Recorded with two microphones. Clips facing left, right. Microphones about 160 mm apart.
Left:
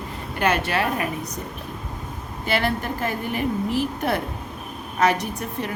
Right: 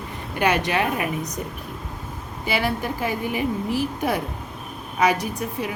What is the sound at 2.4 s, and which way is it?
A woman's voice, 10° right (ahead or behind).